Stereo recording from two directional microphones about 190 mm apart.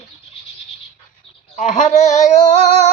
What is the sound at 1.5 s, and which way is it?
Speech, 40° left (ahead or behind).